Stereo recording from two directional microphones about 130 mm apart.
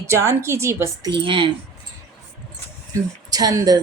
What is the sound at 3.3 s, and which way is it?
Speech, 30° right (ahead or behind).